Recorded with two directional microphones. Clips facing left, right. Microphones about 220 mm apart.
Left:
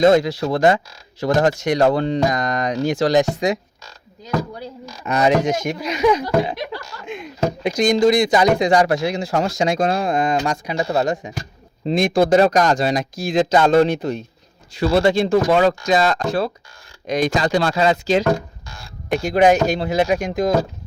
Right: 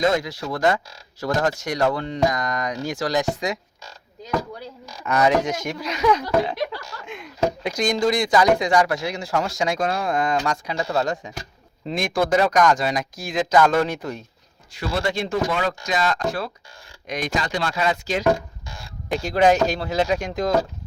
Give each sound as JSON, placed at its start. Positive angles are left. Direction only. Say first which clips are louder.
{"t": 0.0, "sound": "speech", "louder": "left 8 dB", "side_deg": 30}
{"t": 5.0, "sound": "speech", "louder": "left 3 dB", "side_deg": 20}
{"t": 19.1, "sound": "speech", "louder": "left 3 dB", "side_deg": 15}